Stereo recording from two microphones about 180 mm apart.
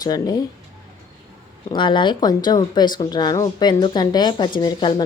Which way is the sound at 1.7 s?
25° left (ahead or behind).